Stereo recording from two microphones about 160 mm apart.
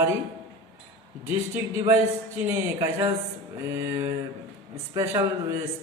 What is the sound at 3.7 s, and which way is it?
A man's voice, 15° right (ahead or behind).